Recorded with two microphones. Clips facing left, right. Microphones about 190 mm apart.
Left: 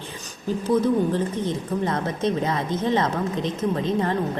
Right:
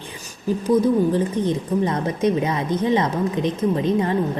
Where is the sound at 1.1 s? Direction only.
15° right (ahead or behind).